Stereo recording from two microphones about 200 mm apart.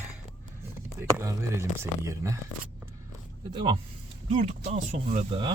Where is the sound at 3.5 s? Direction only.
25° right (ahead or behind).